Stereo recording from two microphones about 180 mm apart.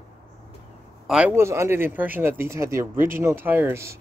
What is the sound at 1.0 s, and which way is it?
Speech, 5° right (ahead or behind).